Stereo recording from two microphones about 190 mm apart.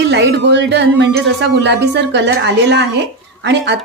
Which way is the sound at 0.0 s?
65° right (ahead or behind).